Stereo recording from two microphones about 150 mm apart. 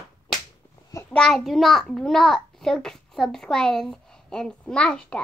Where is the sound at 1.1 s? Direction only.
5° left (ahead or behind).